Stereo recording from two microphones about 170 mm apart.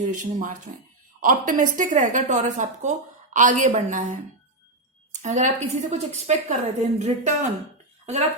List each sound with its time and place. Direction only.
0.0 s a woman's voice: 50° right (ahead or behind)
5.2 s a woman's voice: 45° right (ahead or behind)